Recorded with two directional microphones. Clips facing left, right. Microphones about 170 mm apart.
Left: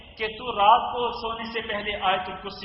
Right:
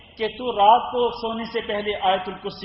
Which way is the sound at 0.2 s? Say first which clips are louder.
Right 5 dB; 30° right (ahead or behind).